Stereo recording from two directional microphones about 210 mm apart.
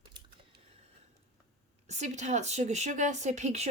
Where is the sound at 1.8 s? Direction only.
35° right (ahead or behind).